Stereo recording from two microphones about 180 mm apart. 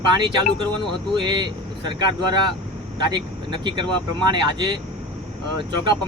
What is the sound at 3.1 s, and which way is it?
Speech, 25° right (ahead or behind).